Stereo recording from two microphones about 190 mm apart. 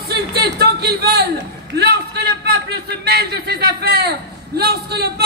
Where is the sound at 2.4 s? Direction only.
60° right (ahead or behind).